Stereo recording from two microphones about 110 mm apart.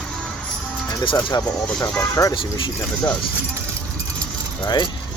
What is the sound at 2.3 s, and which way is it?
Speech, 50° left (ahead or behind).